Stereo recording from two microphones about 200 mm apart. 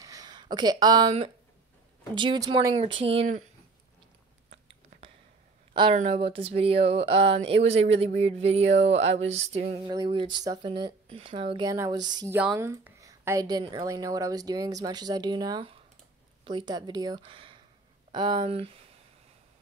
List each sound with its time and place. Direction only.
0.0 s a woman's voice: 20° right (ahead or behind)
5.7 s a woman's voice: 25° right (ahead or behind)